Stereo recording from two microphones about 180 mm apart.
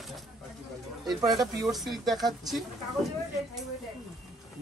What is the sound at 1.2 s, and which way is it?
Speech, 20° right (ahead or behind).